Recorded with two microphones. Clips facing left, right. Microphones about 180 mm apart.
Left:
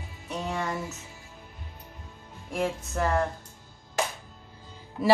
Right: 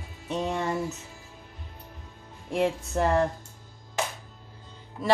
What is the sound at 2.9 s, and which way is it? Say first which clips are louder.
Speech: right 2 dB; 30° right (ahead or behind).